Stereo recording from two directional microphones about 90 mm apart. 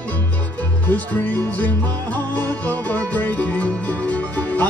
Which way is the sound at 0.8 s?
15° left (ahead or behind).